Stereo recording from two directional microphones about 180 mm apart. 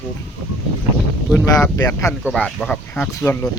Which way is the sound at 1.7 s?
15° left (ahead or behind).